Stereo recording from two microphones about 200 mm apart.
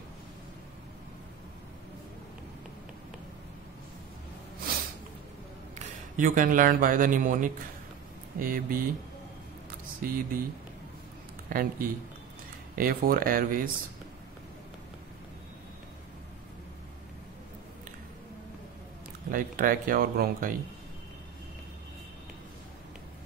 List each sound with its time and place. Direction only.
5.8 s speech: 40° right (ahead or behind)
10.0 s speech: 45° right (ahead or behind)
11.4 s speech: 45° right (ahead or behind)
19.3 s speech: 45° right (ahead or behind)